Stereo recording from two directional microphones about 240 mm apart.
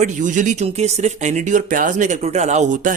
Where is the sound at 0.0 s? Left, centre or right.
Right.